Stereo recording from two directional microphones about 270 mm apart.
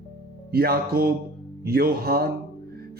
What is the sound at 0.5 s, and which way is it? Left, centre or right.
Speech, right.